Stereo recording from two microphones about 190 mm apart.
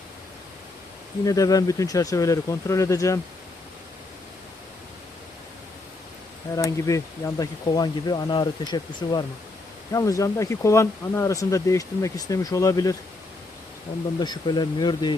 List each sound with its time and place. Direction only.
1.2 s speech: 20° left (ahead or behind)
6.5 s speech: 15° left (ahead or behind)
14.2 s speech: 25° left (ahead or behind)